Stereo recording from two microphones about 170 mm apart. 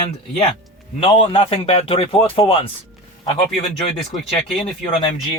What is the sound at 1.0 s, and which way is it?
Speech, 35° left (ahead or behind).